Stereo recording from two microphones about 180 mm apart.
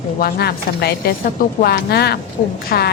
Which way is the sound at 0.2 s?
65° left (ahead or behind).